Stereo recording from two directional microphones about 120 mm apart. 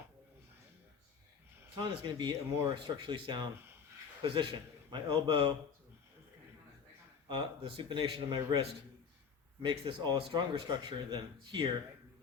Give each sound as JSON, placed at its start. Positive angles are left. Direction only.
{"t": 1.8, "sound": "speech", "side_deg": -40}
{"t": 7.3, "sound": "speech", "side_deg": -40}
{"t": 9.6, "sound": "speech", "side_deg": -40}